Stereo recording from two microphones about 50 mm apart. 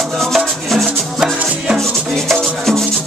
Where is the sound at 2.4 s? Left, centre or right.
Centre.